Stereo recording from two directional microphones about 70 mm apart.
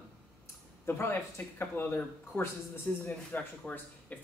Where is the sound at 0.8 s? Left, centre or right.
Left.